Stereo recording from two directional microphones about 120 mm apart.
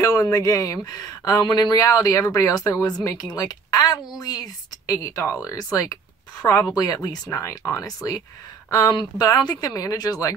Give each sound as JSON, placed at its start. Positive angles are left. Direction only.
{"t": 0.0, "sound": "speech", "side_deg": 30}